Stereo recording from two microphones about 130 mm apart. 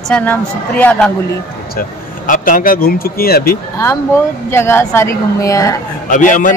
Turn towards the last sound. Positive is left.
turn(degrees=85)